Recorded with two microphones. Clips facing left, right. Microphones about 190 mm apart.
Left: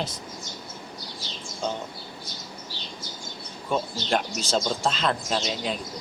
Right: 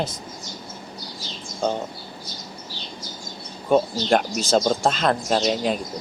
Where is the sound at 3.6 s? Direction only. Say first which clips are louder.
Right 8 dB; 50° right (ahead or behind).